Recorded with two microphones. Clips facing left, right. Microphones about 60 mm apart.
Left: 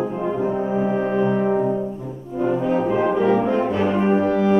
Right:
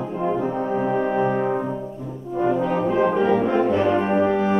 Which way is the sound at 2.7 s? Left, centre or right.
Centre.